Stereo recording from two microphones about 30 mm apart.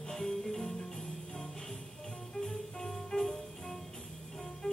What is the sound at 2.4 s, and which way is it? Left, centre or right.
Music, centre.